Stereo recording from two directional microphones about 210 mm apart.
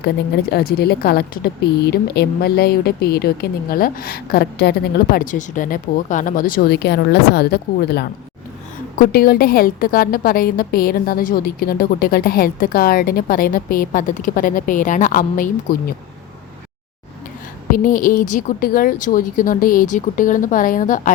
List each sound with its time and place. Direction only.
0.5 s a woman's voice: 50° left (ahead or behind)
17.7 s speech: 40° left (ahead or behind)